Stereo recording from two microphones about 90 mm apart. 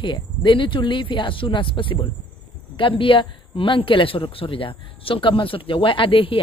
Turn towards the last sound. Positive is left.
turn(degrees=75)  # may be behind; listen again after turning